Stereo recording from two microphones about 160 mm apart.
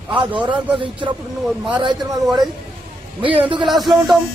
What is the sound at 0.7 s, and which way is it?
A woman's voice, 30° right (ahead or behind).